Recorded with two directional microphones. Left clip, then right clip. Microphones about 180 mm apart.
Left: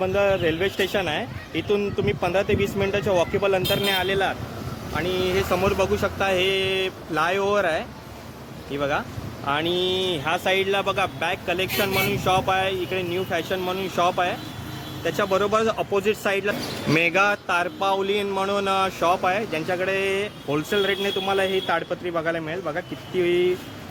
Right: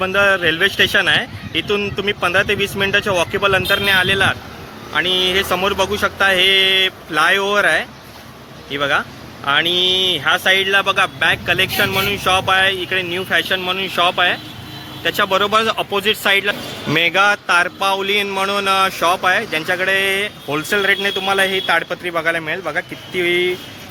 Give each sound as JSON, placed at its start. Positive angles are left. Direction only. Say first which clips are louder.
{"t": 0.0, "sound": "speech", "louder": "right 6 dB", "side_deg": 0}